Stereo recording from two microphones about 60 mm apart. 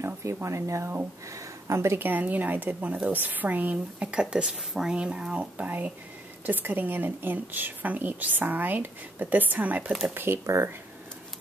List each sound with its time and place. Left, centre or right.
0.0 s speech: right
2.0 s a woman's voice: right
4.1 s a woman's voice: centre
10.1 s speech: right